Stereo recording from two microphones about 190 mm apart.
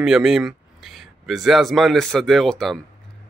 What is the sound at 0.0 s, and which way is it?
Speech, 5° right (ahead or behind).